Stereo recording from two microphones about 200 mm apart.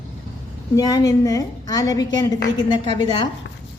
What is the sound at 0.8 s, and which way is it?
A woman's voice, 20° left (ahead or behind).